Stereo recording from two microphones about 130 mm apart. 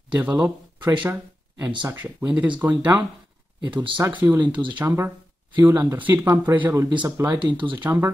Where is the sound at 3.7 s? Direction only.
40° right (ahead or behind).